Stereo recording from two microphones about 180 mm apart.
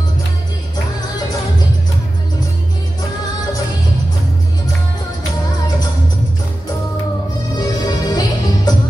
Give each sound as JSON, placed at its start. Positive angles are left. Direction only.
{"t": 7.5, "sound": "music", "side_deg": 25}